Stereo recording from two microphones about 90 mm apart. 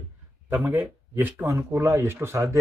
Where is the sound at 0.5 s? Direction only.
20° right (ahead or behind).